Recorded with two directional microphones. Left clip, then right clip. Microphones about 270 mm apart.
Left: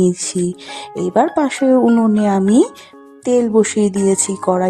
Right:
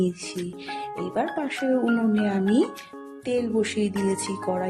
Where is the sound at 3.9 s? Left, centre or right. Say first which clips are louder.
Left 10 dB; centre.